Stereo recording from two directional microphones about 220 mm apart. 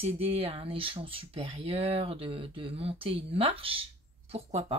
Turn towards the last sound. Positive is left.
turn(degrees=-25)  # may be behind; listen again after turning